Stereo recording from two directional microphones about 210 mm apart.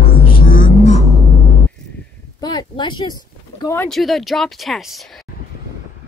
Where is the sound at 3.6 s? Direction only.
10° left (ahead or behind).